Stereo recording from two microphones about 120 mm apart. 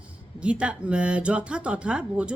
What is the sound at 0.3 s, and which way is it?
A woman's voice, 10° right (ahead or behind).